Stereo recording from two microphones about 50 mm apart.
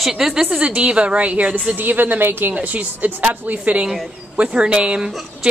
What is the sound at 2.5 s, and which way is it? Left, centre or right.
A woman's voice, right.